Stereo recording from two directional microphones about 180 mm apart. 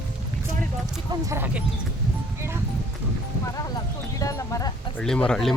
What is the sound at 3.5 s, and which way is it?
Clip-clop, 20° left (ahead or behind).